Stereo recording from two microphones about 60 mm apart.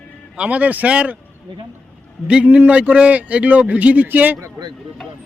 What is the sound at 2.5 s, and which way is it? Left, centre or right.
A man's voice, right.